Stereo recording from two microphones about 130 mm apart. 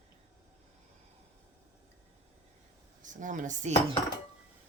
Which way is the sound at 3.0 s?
75° right (ahead or behind).